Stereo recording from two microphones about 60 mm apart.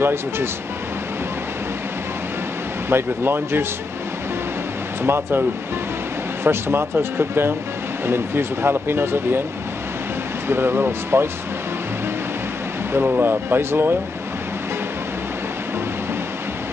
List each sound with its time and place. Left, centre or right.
0.0 s speech: right
2.9 s speech: right
5.0 s speech: right
6.4 s speech: right
10.5 s speech: right
13.0 s speech: right